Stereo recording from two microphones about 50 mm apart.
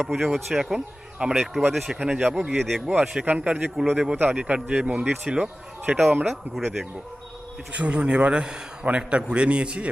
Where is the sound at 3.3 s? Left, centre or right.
Right.